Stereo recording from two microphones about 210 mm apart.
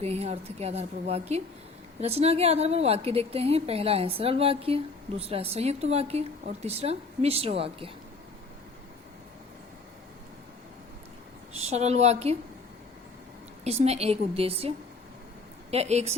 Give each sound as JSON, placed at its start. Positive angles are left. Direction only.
{"t": 0.0, "sound": "a woman's voice", "side_deg": -30}
{"t": 11.5, "sound": "speech", "side_deg": -30}
{"t": 13.7, "sound": "a woman's voice", "side_deg": -30}
{"t": 15.7, "sound": "a woman's voice", "side_deg": -30}